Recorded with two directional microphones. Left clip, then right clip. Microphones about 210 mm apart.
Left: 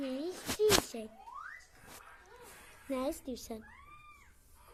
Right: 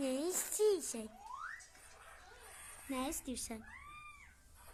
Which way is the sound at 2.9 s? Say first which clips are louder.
Left 5 dB; centre (ahead or behind).